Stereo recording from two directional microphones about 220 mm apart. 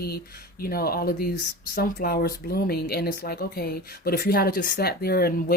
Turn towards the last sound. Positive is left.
turn(degrees=45)  # may be behind; listen again after turning